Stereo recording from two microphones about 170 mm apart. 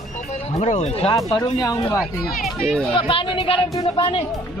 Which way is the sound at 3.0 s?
30° left (ahead or behind).